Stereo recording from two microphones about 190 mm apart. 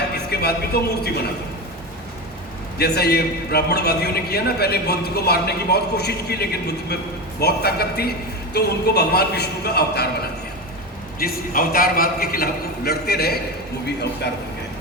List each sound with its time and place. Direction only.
0.3 s a man's voice: 55° left (ahead or behind)
2.7 s a man's voice: 55° left (ahead or behind)
11.2 s a man's voice: 50° left (ahead or behind)